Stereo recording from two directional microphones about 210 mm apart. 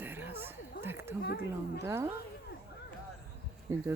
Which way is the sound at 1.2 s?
50° left (ahead or behind).